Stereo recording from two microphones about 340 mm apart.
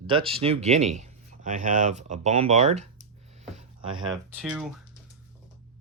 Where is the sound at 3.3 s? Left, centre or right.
Centre.